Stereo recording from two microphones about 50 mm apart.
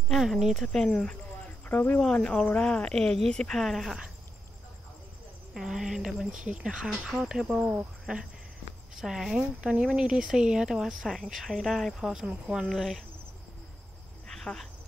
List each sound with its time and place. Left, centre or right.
0.2 s a woman's voice: centre
0.7 s speech: centre
1.7 s speech: left
2.2 s speech: left
3.6 s speech: centre
5.5 s a woman's voice: centre
8.9 s a woman's voice: centre
9.4 s a woman's voice: right; by 12.1 s centre
12.3 s speech: centre
12.6 s speech: centre
14.2 s cricket: centre